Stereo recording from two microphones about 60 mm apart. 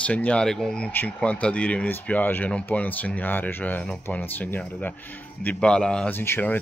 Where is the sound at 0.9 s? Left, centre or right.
Left.